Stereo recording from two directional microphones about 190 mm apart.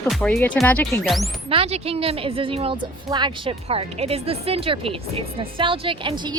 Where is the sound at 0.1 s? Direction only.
5° left (ahead or behind).